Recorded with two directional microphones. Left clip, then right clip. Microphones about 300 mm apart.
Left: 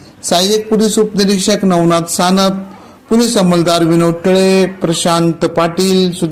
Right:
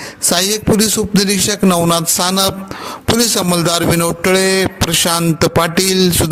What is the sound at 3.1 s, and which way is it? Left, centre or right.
Music, right.